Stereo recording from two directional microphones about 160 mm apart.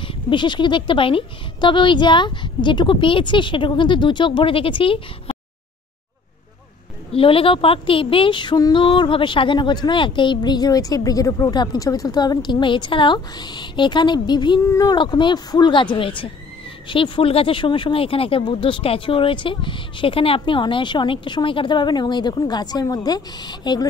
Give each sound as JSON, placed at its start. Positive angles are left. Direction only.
{"t": 0.1, "sound": "speech", "side_deg": 30}
{"t": 7.1, "sound": "a woman's voice", "side_deg": 35}